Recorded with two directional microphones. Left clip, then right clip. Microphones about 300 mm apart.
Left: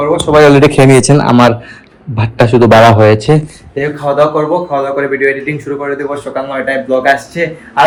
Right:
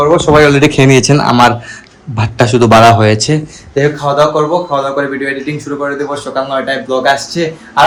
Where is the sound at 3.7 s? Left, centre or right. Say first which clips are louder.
Right 2 dB; right.